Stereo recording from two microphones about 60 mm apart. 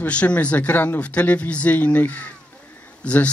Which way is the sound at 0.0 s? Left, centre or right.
Left.